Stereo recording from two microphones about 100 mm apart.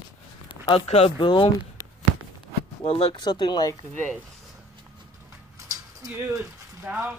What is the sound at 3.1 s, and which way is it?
Speech, 45° left (ahead or behind).